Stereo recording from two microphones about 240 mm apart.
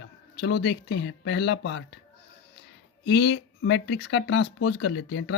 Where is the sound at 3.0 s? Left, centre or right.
Left.